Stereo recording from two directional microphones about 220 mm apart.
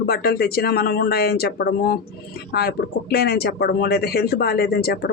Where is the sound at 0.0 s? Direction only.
45° left (ahead or behind).